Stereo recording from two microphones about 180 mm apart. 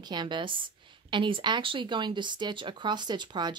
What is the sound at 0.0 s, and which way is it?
A woman's voice, 25° right (ahead or behind).